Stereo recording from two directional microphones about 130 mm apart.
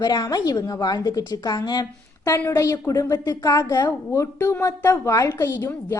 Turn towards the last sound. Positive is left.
turn(degrees=20)  # may be behind; listen again after turning